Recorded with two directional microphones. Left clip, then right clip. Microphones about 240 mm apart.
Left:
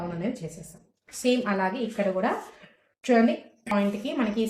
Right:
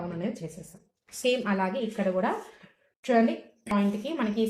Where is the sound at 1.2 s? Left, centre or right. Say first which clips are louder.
Left 2 dB; right.